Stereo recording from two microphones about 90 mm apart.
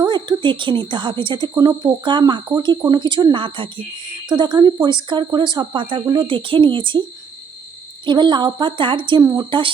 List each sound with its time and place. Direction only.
0.0 s speech: 55° right (ahead or behind)
4.3 s speech: 55° right (ahead or behind)
8.0 s speech: 60° right (ahead or behind)